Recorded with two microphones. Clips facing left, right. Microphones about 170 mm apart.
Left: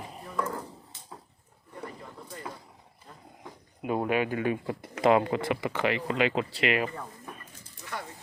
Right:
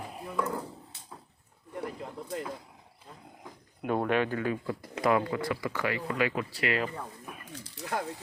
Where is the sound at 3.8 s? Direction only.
5° left (ahead or behind).